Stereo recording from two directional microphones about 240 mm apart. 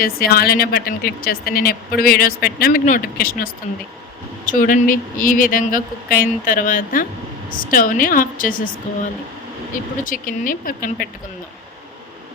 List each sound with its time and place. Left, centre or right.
0.0 s speech: left
9.7 s speech: left